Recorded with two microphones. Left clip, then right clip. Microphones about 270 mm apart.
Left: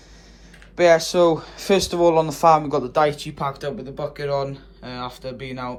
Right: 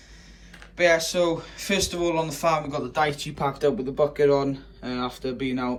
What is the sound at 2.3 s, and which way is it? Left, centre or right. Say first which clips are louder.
Speech: left 8 dB; centre.